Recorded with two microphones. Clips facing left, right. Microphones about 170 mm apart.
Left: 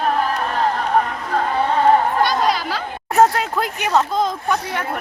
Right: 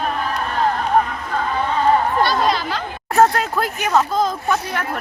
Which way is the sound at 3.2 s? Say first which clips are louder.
Even; 15° left (ahead or behind).